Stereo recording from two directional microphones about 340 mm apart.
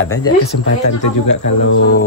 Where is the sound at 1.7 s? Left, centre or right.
Left.